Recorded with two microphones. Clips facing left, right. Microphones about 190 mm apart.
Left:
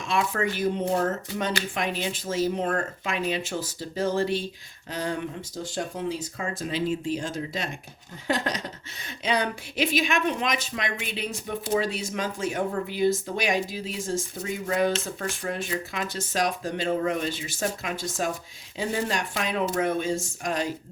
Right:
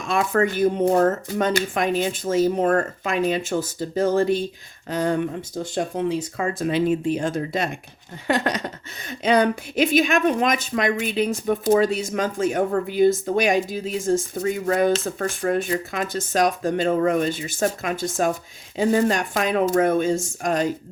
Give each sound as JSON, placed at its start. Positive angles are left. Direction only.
{"t": 0.1, "sound": "a woman's voice", "side_deg": -50}
{"t": 5.7, "sound": "a woman's voice", "side_deg": -60}